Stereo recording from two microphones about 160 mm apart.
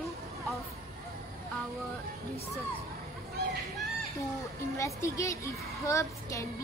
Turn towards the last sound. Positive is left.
turn(degrees=20)  # may be behind; listen again after turning